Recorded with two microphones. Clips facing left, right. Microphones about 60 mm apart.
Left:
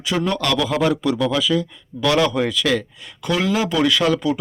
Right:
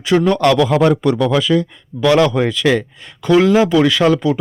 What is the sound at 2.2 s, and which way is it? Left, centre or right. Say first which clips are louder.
Speech: right 5 dB; centre.